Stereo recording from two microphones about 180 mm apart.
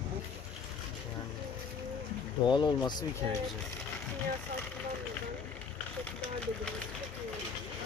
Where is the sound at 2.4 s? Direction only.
25° left (ahead or behind).